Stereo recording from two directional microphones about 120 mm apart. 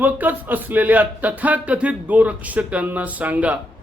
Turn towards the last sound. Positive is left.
turn(degrees=-10)  # may be behind; listen again after turning